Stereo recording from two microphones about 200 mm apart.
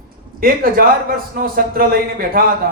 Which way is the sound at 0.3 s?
45° right (ahead or behind).